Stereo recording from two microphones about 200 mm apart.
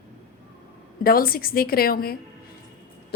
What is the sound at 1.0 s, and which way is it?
A woman's voice, 45° left (ahead or behind).